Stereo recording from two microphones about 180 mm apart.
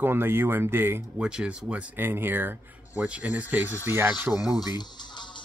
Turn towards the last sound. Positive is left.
turn(degrees=25)  # may be behind; listen again after turning